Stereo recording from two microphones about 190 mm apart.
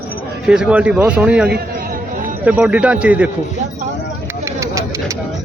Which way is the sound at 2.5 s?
5° right (ahead or behind).